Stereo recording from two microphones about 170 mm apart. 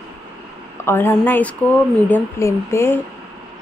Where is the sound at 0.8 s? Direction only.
15° left (ahead or behind).